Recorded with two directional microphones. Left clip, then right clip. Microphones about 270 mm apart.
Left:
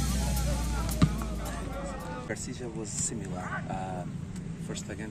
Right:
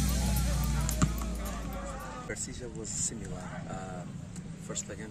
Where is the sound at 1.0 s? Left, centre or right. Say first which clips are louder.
Left 3 dB; centre.